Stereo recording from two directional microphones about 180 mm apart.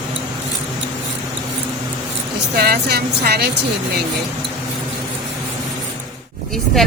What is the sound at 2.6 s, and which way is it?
Speech, 60° right (ahead or behind).